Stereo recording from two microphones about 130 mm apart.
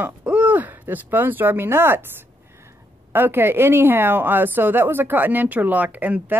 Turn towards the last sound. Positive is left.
turn(degrees=-15)  # may be behind; listen again after turning